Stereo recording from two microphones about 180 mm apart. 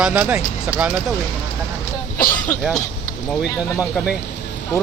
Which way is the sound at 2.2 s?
50° left (ahead or behind).